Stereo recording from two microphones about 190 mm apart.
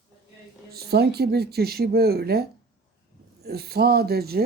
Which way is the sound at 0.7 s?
55° right (ahead or behind).